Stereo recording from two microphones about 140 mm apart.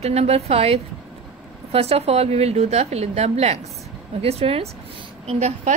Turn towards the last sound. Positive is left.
turn(degrees=-50)  # may be behind; listen again after turning